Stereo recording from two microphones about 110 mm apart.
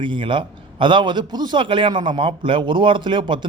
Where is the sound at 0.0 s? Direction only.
50° right (ahead or behind).